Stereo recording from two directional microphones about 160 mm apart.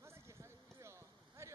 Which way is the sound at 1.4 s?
15° right (ahead or behind).